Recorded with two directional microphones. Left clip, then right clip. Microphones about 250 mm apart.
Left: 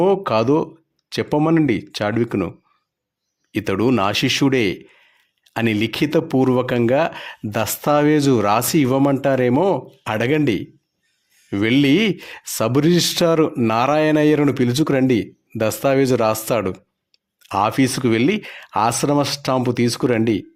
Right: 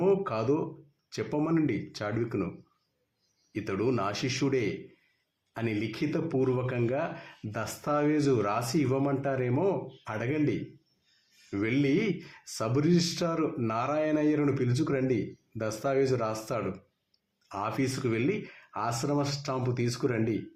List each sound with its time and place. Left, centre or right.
0.0 s speech: left
3.5 s speech: left
11.5 s speech: left